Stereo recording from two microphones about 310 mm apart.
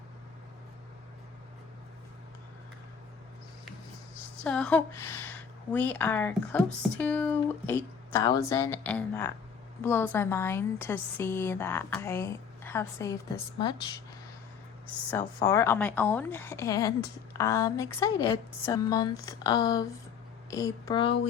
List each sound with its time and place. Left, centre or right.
4.4 s a woman's voice: centre
15.1 s a woman's voice: centre